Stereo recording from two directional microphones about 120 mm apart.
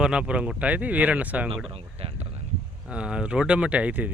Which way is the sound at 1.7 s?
50° right (ahead or behind).